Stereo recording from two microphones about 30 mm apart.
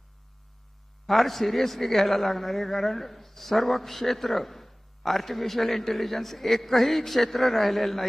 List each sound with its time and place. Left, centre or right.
1.0 s a man's voice: centre